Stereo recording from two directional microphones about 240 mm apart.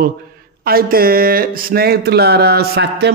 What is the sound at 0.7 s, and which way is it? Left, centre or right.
A man's voice, right.